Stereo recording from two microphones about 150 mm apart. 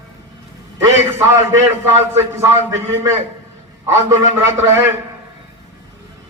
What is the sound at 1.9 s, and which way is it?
A man's voice, 15° right (ahead or behind).